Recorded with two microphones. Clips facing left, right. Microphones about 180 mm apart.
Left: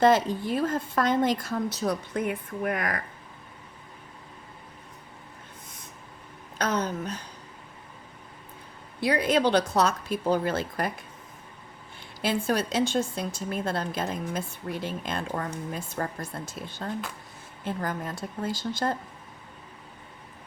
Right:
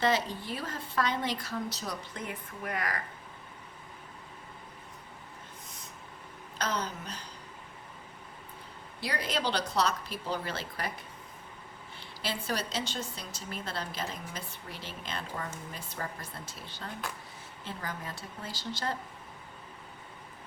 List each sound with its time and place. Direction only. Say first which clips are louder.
0.0 s a woman's voice: left 8 dB; 50° left (ahead or behind)
6.6 s a woman's voice: left 7 dB; 50° left (ahead or behind)
9.0 s a woman's voice: left 10 dB; 55° left (ahead or behind)
11.9 s a woman's voice: left 9 dB; 50° left (ahead or behind)